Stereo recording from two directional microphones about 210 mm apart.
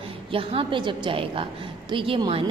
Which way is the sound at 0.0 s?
25° right (ahead or behind).